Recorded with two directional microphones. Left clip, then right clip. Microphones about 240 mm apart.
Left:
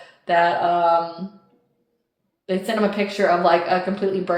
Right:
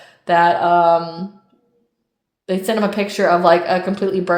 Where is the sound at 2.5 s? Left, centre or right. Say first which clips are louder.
Right 3 dB; right.